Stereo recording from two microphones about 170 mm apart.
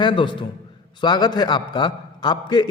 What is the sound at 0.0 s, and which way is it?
A man's voice, 30° left (ahead or behind).